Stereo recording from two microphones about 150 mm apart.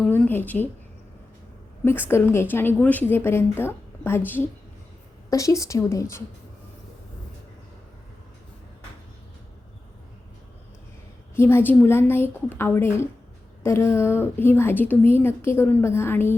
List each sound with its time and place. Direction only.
0.1 s a woman's voice: 15° left (ahead or behind)
1.8 s a woman's voice: 15° left (ahead or behind)
5.3 s a woman's voice: 20° left (ahead or behind)
11.3 s a woman's voice: 15° left (ahead or behind)